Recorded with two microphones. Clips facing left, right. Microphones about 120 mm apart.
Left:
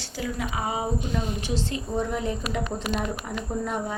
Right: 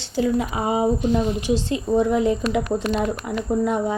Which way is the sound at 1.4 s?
15° right (ahead or behind).